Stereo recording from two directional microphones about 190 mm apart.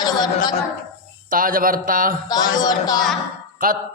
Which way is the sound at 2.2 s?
20° left (ahead or behind).